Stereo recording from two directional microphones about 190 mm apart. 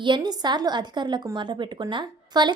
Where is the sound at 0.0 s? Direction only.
25° right (ahead or behind).